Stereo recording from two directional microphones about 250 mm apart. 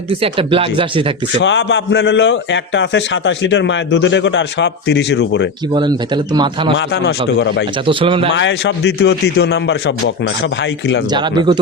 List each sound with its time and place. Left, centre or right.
0.1 s speech: right
1.4 s a man's voice: left
5.7 s a man's voice: centre
6.7 s a man's voice: left
7.9 s speech: centre
8.4 s a man's voice: left
11.1 s a man's voice: centre